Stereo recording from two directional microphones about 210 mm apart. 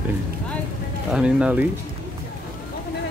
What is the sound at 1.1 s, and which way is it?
Speech, 5° right (ahead or behind).